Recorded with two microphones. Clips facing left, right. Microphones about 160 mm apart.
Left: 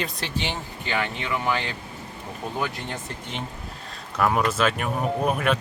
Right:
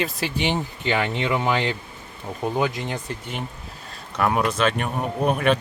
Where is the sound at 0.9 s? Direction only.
25° right (ahead or behind).